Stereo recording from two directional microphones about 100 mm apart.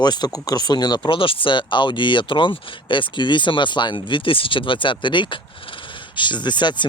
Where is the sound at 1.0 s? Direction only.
60° left (ahead or behind).